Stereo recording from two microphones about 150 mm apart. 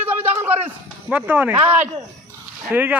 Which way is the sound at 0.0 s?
10° right (ahead or behind).